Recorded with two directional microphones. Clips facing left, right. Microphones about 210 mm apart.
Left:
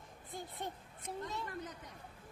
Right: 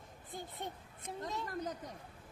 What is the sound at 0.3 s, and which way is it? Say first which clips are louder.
Speech: even; centre (ahead or behind).